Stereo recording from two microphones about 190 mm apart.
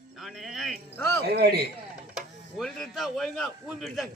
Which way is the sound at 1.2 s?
55° right (ahead or behind).